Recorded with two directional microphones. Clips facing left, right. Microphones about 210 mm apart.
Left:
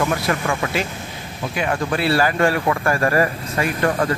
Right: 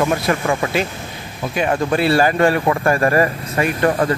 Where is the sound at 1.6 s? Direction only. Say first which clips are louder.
Right 4 dB; 25° right (ahead or behind).